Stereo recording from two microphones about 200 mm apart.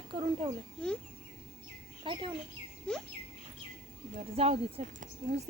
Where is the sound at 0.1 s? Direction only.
25° right (ahead or behind).